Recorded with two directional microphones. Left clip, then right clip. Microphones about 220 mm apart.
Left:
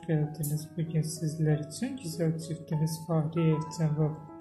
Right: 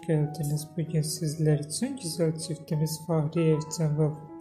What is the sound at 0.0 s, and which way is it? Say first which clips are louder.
A woman's voice: right 4 dB; 25° right (ahead or behind).